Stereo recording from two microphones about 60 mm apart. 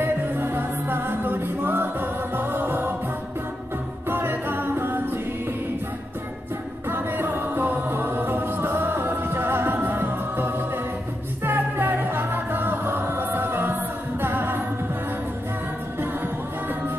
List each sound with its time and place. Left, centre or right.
0.0 s music: right
4.1 s a capella: right
6.9 s music: right